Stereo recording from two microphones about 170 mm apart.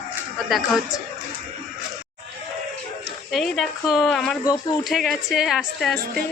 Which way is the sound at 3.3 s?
Centre (ahead or behind).